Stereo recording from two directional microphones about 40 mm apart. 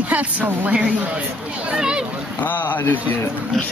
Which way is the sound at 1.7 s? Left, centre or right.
Centre.